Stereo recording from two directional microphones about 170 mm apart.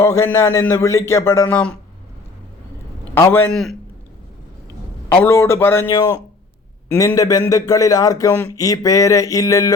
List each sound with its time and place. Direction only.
0.0 s speech: 15° left (ahead or behind)
3.2 s speech: 15° left (ahead or behind)
3.5 s a man's voice: centre (ahead or behind)
5.0 s a man's voice: 15° left (ahead or behind)